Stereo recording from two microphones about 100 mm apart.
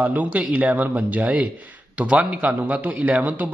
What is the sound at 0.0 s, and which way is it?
A man's voice, 15° right (ahead or behind).